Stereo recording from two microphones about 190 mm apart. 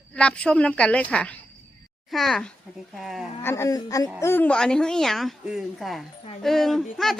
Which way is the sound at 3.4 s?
15° left (ahead or behind).